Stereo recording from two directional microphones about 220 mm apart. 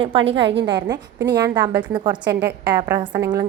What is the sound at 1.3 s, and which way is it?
A woman's voice, 20° right (ahead or behind).